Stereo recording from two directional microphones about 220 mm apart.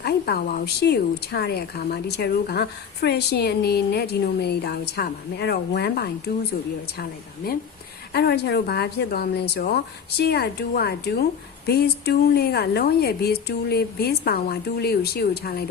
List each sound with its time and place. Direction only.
0.0 s speech: 45° left (ahead or behind)
7.4 s speech: 45° left (ahead or behind)